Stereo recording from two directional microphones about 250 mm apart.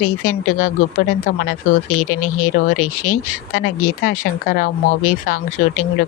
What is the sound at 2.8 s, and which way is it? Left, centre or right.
Speech, left.